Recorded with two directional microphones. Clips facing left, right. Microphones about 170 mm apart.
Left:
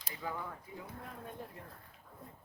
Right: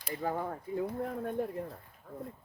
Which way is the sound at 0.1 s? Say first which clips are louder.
Right 8 dB; 45° right (ahead or behind).